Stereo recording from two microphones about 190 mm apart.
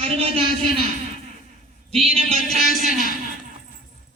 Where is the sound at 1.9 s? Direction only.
30° right (ahead or behind).